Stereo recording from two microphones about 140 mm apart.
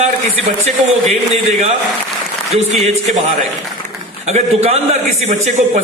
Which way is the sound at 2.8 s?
60° right (ahead or behind).